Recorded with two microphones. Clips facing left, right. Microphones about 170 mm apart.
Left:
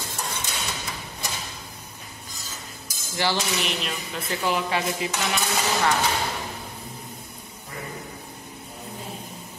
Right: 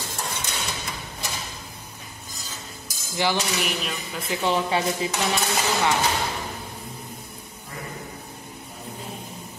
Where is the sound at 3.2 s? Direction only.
15° right (ahead or behind).